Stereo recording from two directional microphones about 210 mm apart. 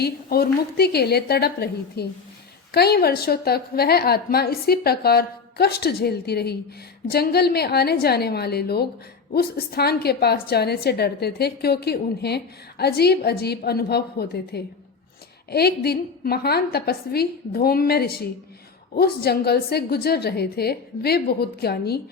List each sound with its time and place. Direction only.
0.0 s a woman's voice: 45° left (ahead or behind)